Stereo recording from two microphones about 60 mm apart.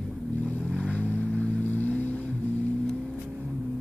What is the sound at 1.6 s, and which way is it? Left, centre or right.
Vehicle, left.